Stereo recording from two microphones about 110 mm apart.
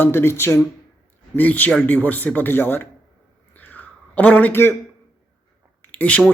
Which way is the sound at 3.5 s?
15° left (ahead or behind).